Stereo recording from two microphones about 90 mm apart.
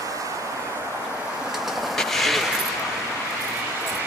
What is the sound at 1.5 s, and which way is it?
Train, centre (ahead or behind).